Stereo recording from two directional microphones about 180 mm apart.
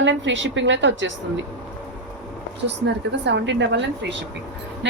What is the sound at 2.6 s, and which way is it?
A woman's voice, 70° right (ahead or behind).